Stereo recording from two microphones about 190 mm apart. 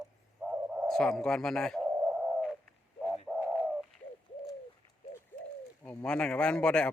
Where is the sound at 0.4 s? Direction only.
10° right (ahead or behind).